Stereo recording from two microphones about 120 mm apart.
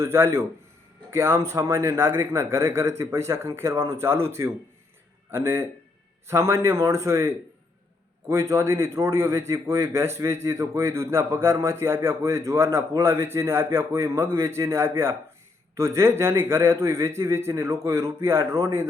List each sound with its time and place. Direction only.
0.0 s a man's voice: 25° right (ahead or behind)
5.3 s a man's voice: 20° right (ahead or behind)